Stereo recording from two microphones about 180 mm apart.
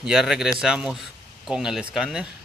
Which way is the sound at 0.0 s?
5° right (ahead or behind).